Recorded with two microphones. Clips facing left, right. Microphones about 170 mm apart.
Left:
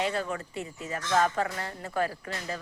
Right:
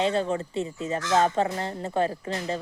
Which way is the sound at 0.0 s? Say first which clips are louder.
Right 6 dB; 25° right (ahead or behind).